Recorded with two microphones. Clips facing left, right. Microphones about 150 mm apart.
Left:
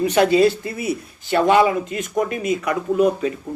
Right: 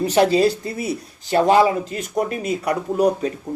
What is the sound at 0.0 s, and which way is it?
Speech, 35° right (ahead or behind).